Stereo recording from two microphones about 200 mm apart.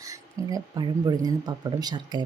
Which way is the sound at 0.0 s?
15° right (ahead or behind).